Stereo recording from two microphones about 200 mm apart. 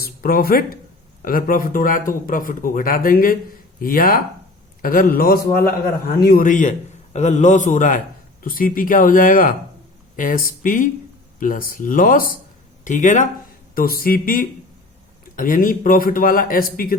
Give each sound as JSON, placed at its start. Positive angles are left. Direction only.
{"t": 0.0, "sound": "a man's voice", "side_deg": 45}